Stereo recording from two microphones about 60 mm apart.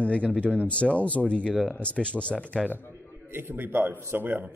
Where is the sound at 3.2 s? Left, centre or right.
Right.